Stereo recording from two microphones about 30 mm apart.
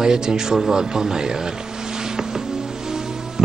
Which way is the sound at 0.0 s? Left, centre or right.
Right.